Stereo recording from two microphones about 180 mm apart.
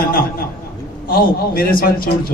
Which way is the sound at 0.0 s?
50° left (ahead or behind).